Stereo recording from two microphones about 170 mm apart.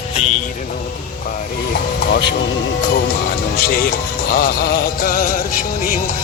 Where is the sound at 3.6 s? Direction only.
60° left (ahead or behind).